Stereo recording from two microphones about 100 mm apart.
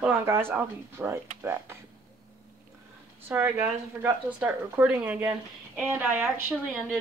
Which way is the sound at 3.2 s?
20° right (ahead or behind).